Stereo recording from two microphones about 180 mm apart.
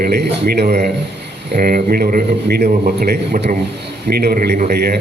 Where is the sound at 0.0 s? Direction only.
60° right (ahead or behind).